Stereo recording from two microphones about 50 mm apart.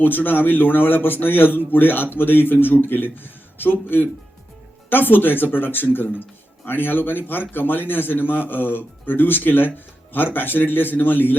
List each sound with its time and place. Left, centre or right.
0.0 s a man's voice: left